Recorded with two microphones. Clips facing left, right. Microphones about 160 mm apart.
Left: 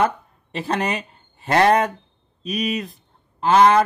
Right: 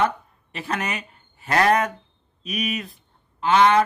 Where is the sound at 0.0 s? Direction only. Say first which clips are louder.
Left 2 dB; 30° left (ahead or behind).